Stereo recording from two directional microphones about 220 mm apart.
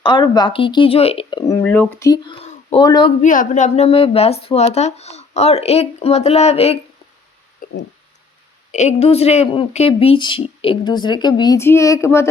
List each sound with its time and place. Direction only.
0.0 s speech: 20° left (ahead or behind)
2.4 s speech: 30° left (ahead or behind)
3.2 s speech: 35° left (ahead or behind)
7.6 s a sound: 40° left (ahead or behind)
8.7 s speech: 30° left (ahead or behind); by 12.3 s 10° left (ahead or behind)